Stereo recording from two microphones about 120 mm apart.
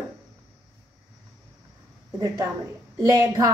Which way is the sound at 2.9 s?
25° right (ahead or behind).